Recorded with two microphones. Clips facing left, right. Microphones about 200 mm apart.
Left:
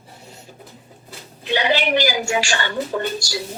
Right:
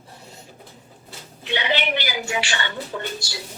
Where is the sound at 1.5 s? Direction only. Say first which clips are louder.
Left 4 dB; 40° left (ahead or behind).